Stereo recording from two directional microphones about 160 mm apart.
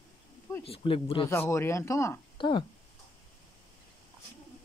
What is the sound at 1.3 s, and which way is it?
Speech, 15° left (ahead or behind).